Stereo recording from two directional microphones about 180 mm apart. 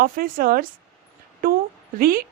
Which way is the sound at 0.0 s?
50° right (ahead or behind).